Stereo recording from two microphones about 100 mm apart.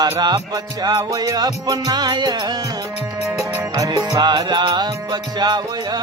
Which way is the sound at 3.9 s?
45° right (ahead or behind).